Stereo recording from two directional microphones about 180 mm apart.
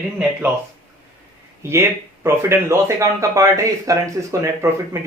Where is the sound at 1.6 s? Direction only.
15° right (ahead or behind).